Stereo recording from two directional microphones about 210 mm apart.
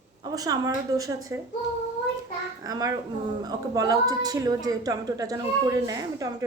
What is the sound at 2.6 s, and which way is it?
Speech, 15° right (ahead or behind).